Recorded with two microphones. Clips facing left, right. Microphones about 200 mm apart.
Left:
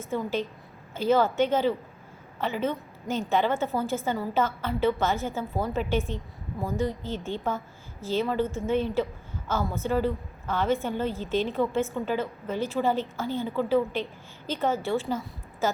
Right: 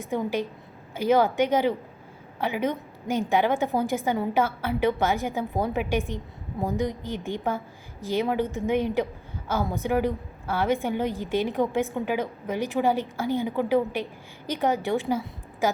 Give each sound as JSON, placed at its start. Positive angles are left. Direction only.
{"t": 0.0, "sound": "a woman's voice", "side_deg": -15}